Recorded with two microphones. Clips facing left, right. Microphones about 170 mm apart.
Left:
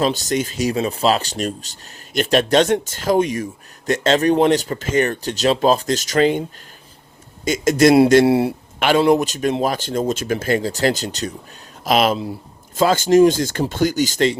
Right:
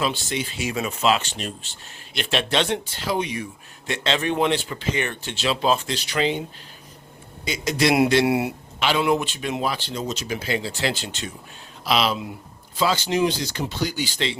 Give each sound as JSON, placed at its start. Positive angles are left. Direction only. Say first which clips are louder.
{"t": 0.0, "sound": "speech", "louder": "left 6 dB", "side_deg": 40}
{"t": 7.4, "sound": "speech", "louder": "left 8 dB", "side_deg": 45}
{"t": 8.2, "sound": "speech", "louder": "left 6 dB", "side_deg": 30}
{"t": 8.8, "sound": "speech", "louder": "left 6 dB", "side_deg": 45}